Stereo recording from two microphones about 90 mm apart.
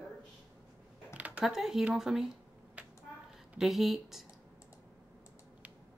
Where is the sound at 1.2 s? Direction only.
15° right (ahead or behind).